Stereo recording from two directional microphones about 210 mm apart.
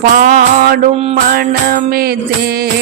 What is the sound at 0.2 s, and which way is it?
Music, 45° right (ahead or behind).